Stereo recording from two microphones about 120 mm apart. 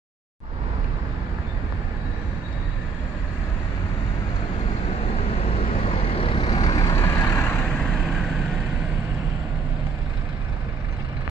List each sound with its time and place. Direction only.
5.9 s vehicle: 50° left (ahead or behind)
6.7 s vehicle: 35° left (ahead or behind)
7.0 s vehicle: 25° left (ahead or behind)